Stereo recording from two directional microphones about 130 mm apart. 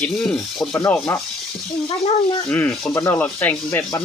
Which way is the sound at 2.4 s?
10° left (ahead or behind).